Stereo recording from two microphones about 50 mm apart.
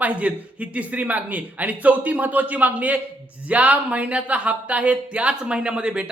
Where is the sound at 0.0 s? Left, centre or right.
Right.